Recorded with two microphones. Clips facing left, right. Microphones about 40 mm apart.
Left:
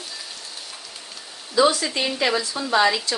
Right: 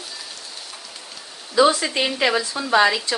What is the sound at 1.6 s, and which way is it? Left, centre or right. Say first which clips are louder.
Speech: right 2 dB; right.